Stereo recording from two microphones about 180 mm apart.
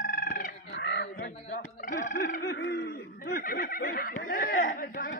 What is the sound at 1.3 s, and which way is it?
Speech, 35° left (ahead or behind).